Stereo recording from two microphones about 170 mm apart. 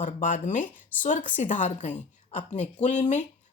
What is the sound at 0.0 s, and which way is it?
Speech, 50° left (ahead or behind).